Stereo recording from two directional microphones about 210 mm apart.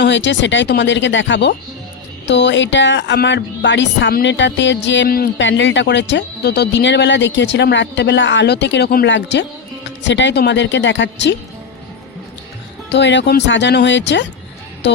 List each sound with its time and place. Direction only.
0.0 s speech: 55° left (ahead or behind)
12.9 s speech: 55° left (ahead or behind)
14.8 s music: 50° left (ahead or behind)